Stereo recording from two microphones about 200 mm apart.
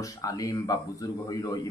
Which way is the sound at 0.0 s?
15° left (ahead or behind).